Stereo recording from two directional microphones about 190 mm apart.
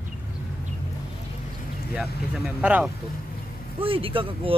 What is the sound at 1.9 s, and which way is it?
Speech, 5° right (ahead or behind).